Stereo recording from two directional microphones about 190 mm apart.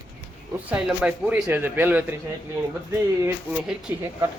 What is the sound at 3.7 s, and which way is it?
Speech, 5° right (ahead or behind).